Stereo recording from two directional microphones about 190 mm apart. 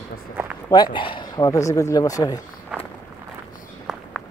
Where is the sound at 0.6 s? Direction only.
20° left (ahead or behind).